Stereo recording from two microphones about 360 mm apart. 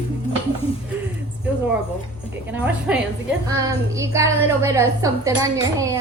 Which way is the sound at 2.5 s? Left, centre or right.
Centre.